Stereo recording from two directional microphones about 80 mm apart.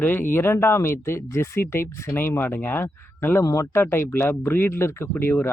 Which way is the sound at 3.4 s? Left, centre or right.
Left.